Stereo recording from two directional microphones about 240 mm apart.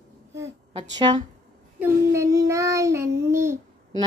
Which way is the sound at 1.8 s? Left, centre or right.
Centre.